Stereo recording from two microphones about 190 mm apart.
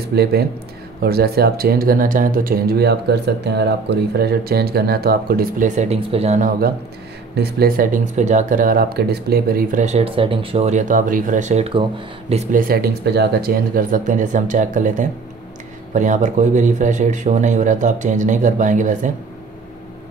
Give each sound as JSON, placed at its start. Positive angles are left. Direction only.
{"t": 0.1, "sound": "speech", "side_deg": -55}
{"t": 7.3, "sound": "speech", "side_deg": -55}
{"t": 12.6, "sound": "speech", "side_deg": -55}